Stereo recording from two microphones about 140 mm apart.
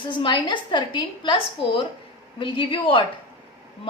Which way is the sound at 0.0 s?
35° left (ahead or behind).